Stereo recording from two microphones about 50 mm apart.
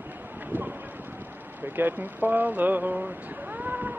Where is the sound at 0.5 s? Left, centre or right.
Right.